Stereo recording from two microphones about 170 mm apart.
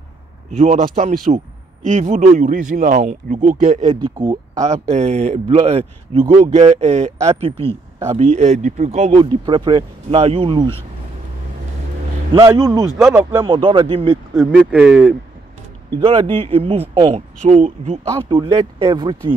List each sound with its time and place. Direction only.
0.5 s a man's voice: 45° right (ahead or behind)
4.0 s speech: 25° right (ahead or behind)
4.6 s speech: 40° right (ahead or behind)
8.2 s speech: 45° right (ahead or behind)
12.3 s speech: 20° right (ahead or behind)
13.5 s speech: 30° right (ahead or behind)
14.3 s speech: 5° left (ahead or behind)
14.7 s speech: 10° right (ahead or behind)
16.4 s speech: 35° right (ahead or behind)
17.4 s speech: 45° right (ahead or behind)
18.3 s speech: 25° right (ahead or behind)